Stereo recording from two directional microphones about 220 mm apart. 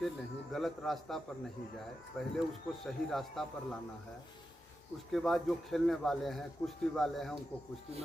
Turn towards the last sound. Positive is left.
turn(degrees=0)  # may be behind; listen again after turning